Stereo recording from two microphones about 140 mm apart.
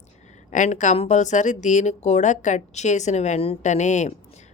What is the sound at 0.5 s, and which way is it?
A woman's voice, 60° left (ahead or behind).